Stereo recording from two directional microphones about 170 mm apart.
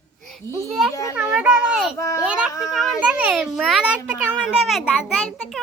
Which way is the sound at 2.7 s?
5° right (ahead or behind).